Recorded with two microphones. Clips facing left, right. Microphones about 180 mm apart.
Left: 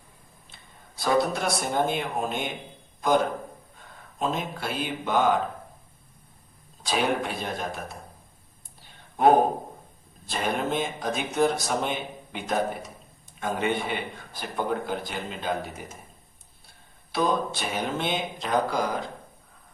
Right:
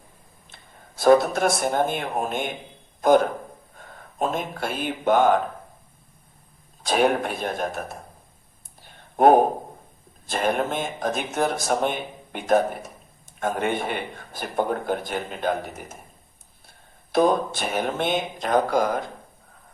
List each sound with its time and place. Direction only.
0.5 s speech: 50° right (ahead or behind)
3.8 s speech: 50° right (ahead or behind)
6.8 s speech: 50° right (ahead or behind)
9.1 s speech: 50° right (ahead or behind)
17.1 s speech: 50° right (ahead or behind)